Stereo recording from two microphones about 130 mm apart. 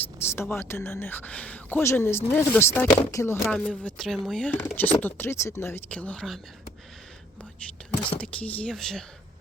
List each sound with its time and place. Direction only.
0.2 s speech: 20° left (ahead or behind)
3.6 s speech: 5° left (ahead or behind)
8.2 s speech: 10° left (ahead or behind)